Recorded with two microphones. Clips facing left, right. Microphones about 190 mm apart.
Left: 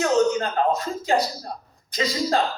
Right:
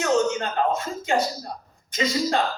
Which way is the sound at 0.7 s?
35° left (ahead or behind).